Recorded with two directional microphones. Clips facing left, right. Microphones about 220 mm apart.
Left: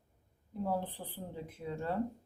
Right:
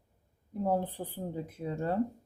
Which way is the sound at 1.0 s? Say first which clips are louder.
Right 6 dB; 45° right (ahead or behind).